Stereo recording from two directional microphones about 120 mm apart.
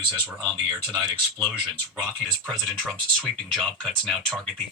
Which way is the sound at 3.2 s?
Centre (ahead or behind).